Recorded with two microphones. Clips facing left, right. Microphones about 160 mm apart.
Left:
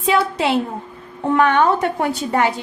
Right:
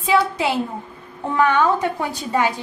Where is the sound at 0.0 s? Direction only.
70° left (ahead or behind).